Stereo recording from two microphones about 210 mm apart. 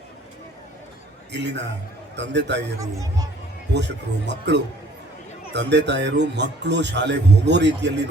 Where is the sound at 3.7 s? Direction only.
55° right (ahead or behind).